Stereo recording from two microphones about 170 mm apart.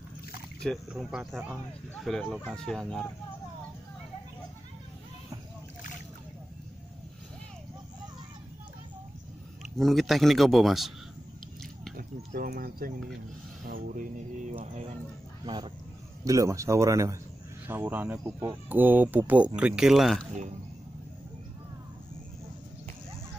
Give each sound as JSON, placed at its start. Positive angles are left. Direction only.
{"t": 0.7, "sound": "speech", "side_deg": 0}
{"t": 9.8, "sound": "speech", "side_deg": 0}
{"t": 12.0, "sound": "bird", "side_deg": -60}
{"t": 13.7, "sound": "speech", "side_deg": -55}
{"t": 15.4, "sound": "speech", "side_deg": -30}